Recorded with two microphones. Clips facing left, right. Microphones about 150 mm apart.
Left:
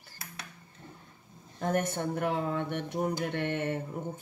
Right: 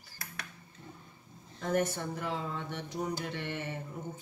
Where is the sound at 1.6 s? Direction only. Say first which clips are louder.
Left 1 dB; 55° left (ahead or behind).